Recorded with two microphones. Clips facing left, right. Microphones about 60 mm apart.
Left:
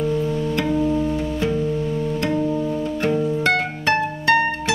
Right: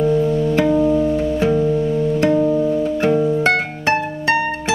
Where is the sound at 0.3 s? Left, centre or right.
Centre.